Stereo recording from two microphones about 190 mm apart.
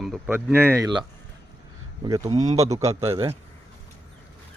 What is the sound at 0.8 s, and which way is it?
Speech, 25° right (ahead or behind).